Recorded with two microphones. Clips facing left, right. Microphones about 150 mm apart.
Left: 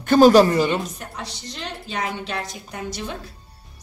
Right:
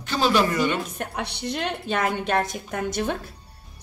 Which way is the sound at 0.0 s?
50° left (ahead or behind).